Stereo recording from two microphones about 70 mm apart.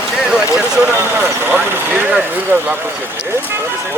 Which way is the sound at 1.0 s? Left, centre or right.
Right.